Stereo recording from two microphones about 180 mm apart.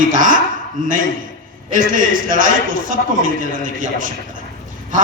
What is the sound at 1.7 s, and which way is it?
A man's voice, 50° right (ahead or behind).